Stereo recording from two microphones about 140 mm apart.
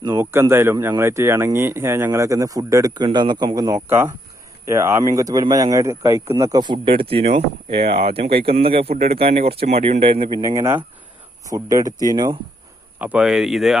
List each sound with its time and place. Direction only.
0.0 s speech: 25° right (ahead or behind); by 10.3 s 40° right (ahead or behind)
10.3 s speech: 20° right (ahead or behind)
13.0 s speech: 10° right (ahead or behind)